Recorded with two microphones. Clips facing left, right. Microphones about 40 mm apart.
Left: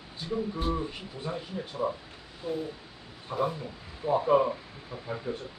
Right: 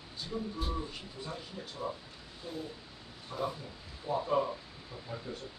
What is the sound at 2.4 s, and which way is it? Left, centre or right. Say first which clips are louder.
Speech: left 9 dB; centre.